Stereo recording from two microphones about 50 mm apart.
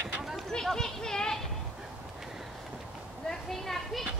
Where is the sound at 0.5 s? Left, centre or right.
Centre.